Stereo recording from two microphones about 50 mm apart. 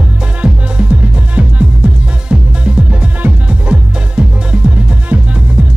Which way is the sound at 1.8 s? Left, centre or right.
Right.